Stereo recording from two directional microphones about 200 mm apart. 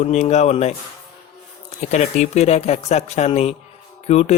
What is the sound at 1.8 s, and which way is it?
Speech, 35° left (ahead or behind).